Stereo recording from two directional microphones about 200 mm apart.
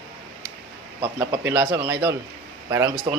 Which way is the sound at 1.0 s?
15° right (ahead or behind).